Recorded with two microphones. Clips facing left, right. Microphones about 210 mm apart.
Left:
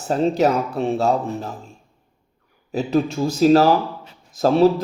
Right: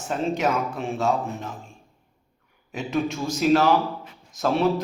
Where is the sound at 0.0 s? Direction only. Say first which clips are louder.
Left 6 dB; 35° left (ahead or behind).